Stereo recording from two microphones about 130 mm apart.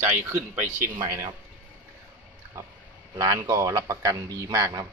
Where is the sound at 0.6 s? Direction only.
80° right.